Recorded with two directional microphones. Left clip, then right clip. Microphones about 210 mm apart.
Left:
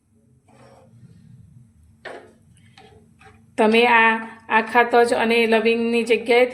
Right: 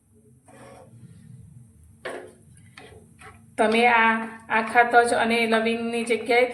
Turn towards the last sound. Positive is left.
turn(degrees=45)  # may be behind; listen again after turning